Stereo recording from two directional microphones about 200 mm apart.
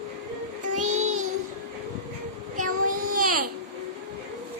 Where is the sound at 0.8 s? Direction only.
35° right (ahead or behind).